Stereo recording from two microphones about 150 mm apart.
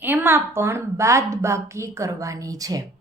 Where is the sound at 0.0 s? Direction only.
15° right (ahead or behind).